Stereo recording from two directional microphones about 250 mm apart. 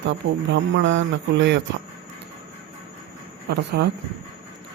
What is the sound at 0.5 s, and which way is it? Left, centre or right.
Speech, right.